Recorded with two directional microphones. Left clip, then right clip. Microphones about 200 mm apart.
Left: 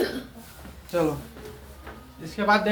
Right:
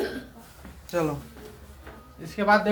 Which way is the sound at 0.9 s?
30° right (ahead or behind).